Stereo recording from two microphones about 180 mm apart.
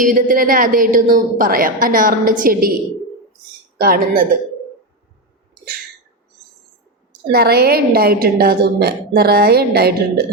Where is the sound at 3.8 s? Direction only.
55° right (ahead or behind).